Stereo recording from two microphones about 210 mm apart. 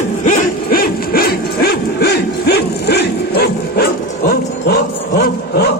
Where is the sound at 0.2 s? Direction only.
40° left (ahead or behind).